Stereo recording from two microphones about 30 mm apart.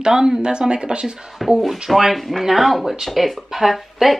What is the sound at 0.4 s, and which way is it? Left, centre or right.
Speech, right.